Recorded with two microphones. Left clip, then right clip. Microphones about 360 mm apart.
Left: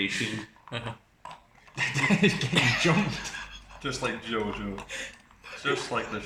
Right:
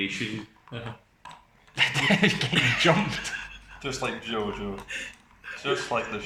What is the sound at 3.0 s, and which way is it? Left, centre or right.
Speech, right.